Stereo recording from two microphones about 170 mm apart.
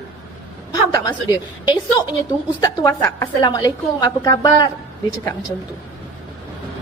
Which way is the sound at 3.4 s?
25° left (ahead or behind).